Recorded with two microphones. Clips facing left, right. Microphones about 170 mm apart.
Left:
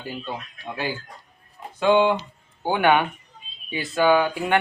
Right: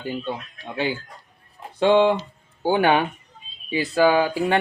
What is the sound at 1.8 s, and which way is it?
Speech, 30° right (ahead or behind).